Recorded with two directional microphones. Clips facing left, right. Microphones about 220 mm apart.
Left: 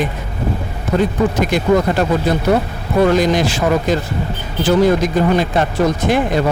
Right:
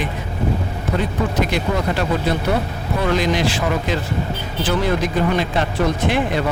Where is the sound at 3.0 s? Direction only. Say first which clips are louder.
Left 6 dB; 45° left (ahead or behind).